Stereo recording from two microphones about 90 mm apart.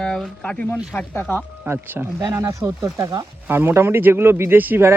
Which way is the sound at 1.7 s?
25° right (ahead or behind).